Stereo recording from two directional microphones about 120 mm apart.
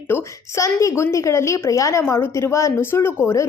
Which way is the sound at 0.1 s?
25° left (ahead or behind).